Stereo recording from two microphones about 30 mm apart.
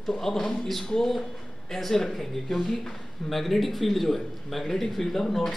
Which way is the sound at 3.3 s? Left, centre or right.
Centre.